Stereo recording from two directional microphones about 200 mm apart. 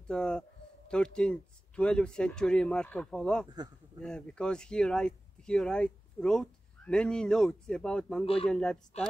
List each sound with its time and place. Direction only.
0.0 s speech: 5° left (ahead or behind)
8.9 s speech: 30° left (ahead or behind)